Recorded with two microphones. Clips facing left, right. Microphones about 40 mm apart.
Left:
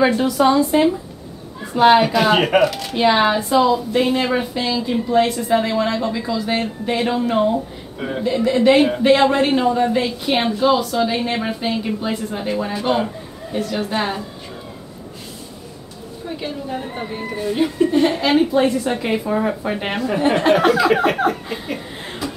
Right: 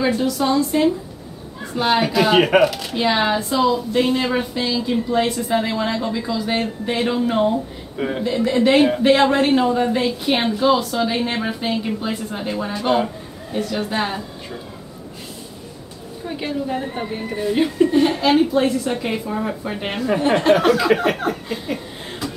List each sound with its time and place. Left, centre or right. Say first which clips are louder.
0.0 s speech: left 4 dB; left
2.0 s speech: left 1 dB; centre
16.3 s a woman's voice: right 3 dB; centre
17.0 s speech: right 1 dB; centre